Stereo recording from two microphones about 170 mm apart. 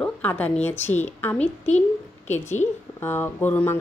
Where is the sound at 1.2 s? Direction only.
10° left (ahead or behind).